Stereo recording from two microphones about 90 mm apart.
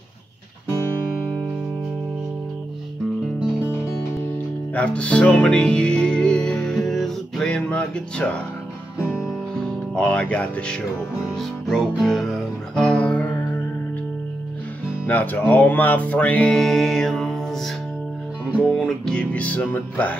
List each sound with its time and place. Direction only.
4.7 s music: 15° left (ahead or behind)
9.6 s speech: 15° left (ahead or behind)
11.3 s music: centre (ahead or behind)
15.0 s music: 20° left (ahead or behind)